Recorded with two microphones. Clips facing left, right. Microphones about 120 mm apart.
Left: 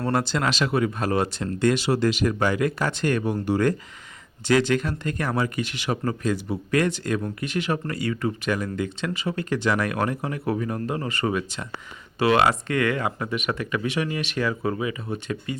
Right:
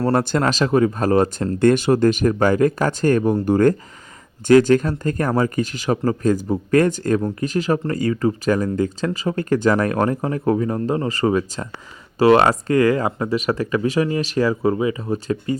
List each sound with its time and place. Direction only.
0.0 s speech: 40° right (ahead or behind)